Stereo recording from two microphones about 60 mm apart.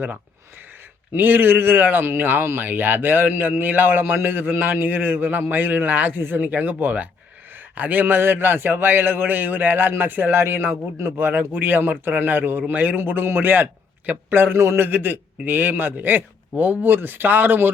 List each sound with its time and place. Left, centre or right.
1.1 s a man's voice: right
14.8 s a man's voice: right